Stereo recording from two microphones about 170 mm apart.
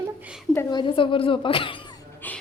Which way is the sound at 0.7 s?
30° left (ahead or behind).